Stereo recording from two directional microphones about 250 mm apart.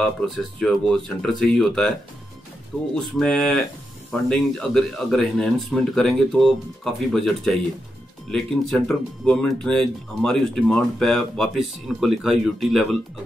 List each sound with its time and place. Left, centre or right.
0.6 s speech: centre
3.0 s speech: centre